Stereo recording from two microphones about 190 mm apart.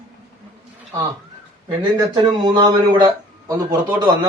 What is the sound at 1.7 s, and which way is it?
A man's voice, 25° right (ahead or behind).